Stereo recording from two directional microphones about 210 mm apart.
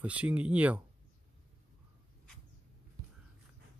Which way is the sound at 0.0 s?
5° right (ahead or behind).